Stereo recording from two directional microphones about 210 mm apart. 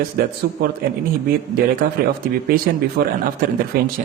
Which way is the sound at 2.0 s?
45° right (ahead or behind).